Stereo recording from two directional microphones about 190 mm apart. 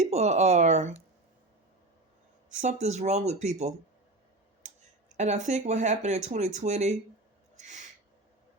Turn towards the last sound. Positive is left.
turn(degrees=-40)  # may be behind; listen again after turning